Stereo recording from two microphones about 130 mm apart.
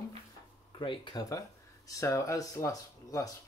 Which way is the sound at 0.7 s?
40° left (ahead or behind).